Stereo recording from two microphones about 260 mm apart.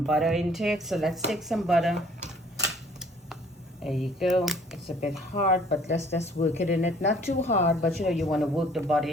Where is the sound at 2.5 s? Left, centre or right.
Centre.